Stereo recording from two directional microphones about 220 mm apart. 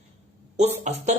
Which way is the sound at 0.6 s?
30° right (ahead or behind).